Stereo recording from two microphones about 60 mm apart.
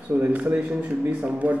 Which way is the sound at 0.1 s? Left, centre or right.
Right.